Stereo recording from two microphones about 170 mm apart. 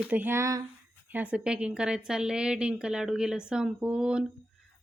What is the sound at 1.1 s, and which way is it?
A woman's voice, 10° right (ahead or behind).